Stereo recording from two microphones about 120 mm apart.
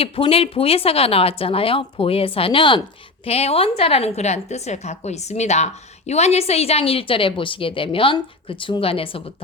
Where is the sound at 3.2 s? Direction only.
55° left (ahead or behind).